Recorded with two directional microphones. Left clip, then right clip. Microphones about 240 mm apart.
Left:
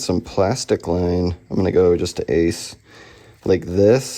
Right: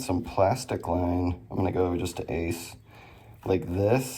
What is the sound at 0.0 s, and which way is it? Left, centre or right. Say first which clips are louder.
Speech: left 5 dB; left.